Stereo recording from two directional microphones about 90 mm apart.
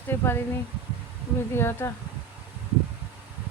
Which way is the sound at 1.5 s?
30° left (ahead or behind).